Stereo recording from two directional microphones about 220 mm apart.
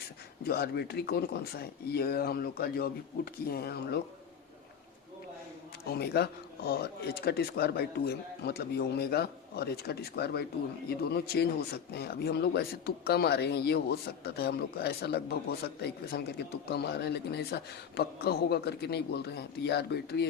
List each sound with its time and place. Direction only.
0.4 s speech: 45° left (ahead or behind)
5.9 s speech: 45° left (ahead or behind)